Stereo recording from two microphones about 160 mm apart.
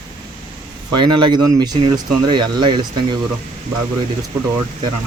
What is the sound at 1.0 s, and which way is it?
Speech, 30° right (ahead or behind).